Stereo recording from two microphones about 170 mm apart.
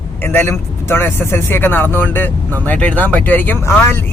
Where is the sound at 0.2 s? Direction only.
15° left (ahead or behind).